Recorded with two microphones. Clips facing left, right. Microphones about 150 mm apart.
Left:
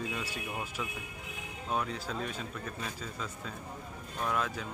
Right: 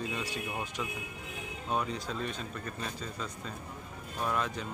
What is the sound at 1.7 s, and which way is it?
A man's voice, centre (ahead or behind).